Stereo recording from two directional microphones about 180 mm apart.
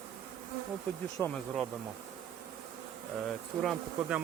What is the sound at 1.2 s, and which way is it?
Speech, 5° left (ahead or behind).